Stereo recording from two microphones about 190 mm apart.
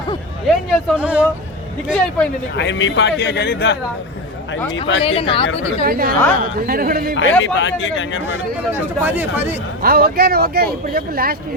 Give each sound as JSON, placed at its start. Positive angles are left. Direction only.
{"t": 0.4, "sound": "speech", "side_deg": 0}
{"t": 2.6, "sound": "a man's voice", "side_deg": 75}
{"t": 4.6, "sound": "speech", "side_deg": 20}
{"t": 5.8, "sound": "speech", "side_deg": -50}
{"t": 7.2, "sound": "speech", "side_deg": 80}
{"t": 8.7, "sound": "speech", "side_deg": -10}
{"t": 9.8, "sound": "speech", "side_deg": -55}